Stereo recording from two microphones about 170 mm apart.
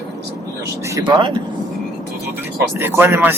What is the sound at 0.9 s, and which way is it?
Speech, 25° right (ahead or behind).